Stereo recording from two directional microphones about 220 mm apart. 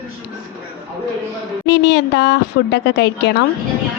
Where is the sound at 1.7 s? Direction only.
50° left (ahead or behind).